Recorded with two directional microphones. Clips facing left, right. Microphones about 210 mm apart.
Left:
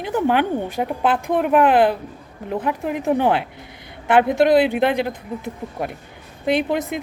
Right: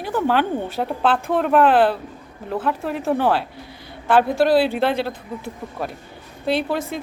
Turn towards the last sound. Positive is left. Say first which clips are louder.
# left 2 dB
turn(degrees=15)  # may be behind; listen again after turning